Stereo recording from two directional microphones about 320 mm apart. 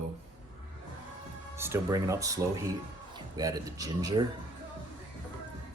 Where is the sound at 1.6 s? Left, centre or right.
Centre.